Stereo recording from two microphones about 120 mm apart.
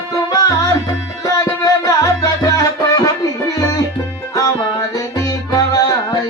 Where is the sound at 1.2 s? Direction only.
30° left (ahead or behind).